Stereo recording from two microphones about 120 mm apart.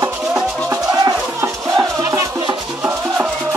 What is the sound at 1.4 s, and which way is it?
Music, 25° right (ahead or behind).